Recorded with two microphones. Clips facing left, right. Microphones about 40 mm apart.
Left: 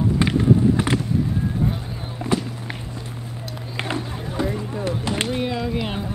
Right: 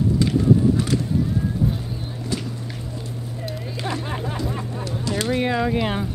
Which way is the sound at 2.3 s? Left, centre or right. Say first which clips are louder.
Left 6 dB; left.